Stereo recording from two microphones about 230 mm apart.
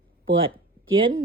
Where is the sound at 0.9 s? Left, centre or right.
Right.